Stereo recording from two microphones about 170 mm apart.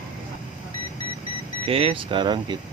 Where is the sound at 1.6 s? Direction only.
35° right (ahead or behind).